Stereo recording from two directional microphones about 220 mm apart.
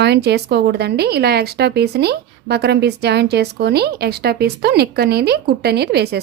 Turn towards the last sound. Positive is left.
turn(degrees=-50)  # may be behind; listen again after turning